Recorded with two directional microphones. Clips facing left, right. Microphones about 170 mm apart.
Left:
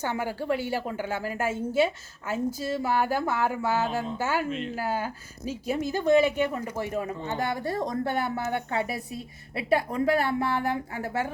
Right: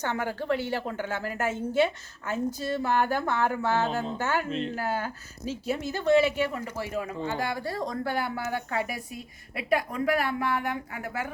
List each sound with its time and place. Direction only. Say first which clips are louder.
0.0 s a woman's voice: left 1 dB; 10° left (ahead or behind)
4.4 s speech: right 1 dB; 30° right (ahead or behind)
4.7 s a woman's voice: left 1 dB; 10° left (ahead or behind); by 11.3 s 30° left (ahead or behind)